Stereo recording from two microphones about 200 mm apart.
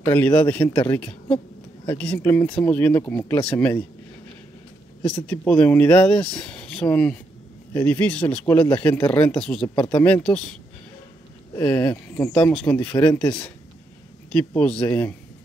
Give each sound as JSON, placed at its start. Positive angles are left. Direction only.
{"t": 0.0, "sound": "speech", "side_deg": 10}
{"t": 5.0, "sound": "speech", "side_deg": 10}
{"t": 9.8, "sound": "speech", "side_deg": 20}
{"t": 10.0, "sound": "speech", "side_deg": 5}
{"t": 11.5, "sound": "speech", "side_deg": 15}
{"t": 14.3, "sound": "speech", "side_deg": 5}